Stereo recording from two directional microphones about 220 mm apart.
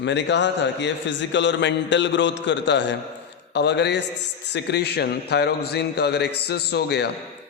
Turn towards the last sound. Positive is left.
turn(degrees=50)  # may be behind; listen again after turning